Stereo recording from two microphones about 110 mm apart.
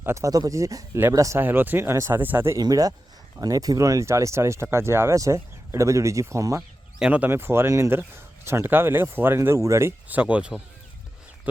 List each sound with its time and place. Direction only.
0.0 s speech: 25° right (ahead or behind)
1.4 s speech: 20° right (ahead or behind)
2.6 s speech: 35° right (ahead or behind)
10.1 s speech: 15° right (ahead or behind)